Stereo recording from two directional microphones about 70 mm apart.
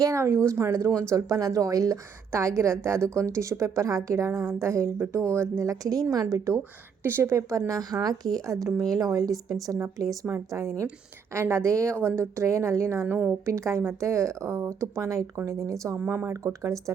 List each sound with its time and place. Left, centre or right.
0.0 s a woman's voice: right
7.0 s speech: right
7.7 s a woman's voice: right
16.4 s a woman's voice: right